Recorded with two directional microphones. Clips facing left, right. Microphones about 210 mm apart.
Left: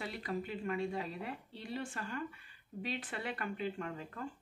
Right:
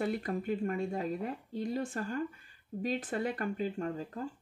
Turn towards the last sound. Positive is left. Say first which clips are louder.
# right 6 dB
turn(degrees=-35)  # may be behind; listen again after turning